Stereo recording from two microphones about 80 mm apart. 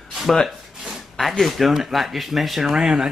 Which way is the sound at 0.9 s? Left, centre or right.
Centre.